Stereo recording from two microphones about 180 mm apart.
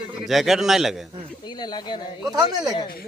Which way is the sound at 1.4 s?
25° left (ahead or behind).